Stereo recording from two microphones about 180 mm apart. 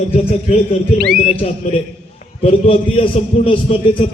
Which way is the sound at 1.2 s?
35° left (ahead or behind).